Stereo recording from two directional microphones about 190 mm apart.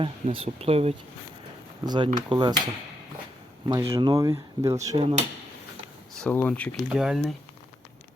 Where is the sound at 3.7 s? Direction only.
15° right (ahead or behind).